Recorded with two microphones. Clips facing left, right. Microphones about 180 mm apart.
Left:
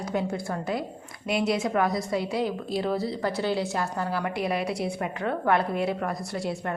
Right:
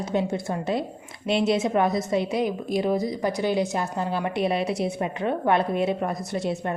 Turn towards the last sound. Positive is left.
turn(degrees=-20)  # may be behind; listen again after turning